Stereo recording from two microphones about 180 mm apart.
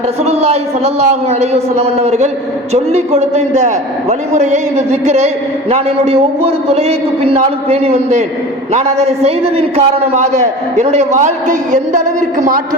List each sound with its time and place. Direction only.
0.3 s a man's voice: 35° right (ahead or behind)